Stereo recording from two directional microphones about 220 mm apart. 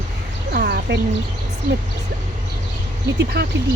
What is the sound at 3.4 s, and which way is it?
Speech, 50° right (ahead or behind).